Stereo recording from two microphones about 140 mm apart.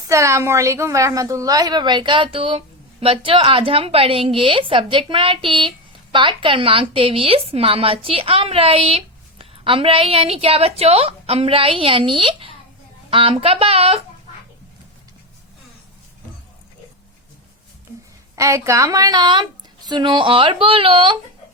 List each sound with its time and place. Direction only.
0.1 s a woman's voice: 20° right (ahead or behind); by 14.0 s 45° right (ahead or behind)
18.3 s a woman's voice: 20° right (ahead or behind); by 21.2 s 40° right (ahead or behind)